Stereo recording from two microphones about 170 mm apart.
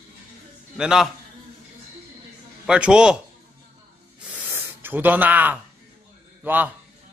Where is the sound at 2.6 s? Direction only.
5° right (ahead or behind).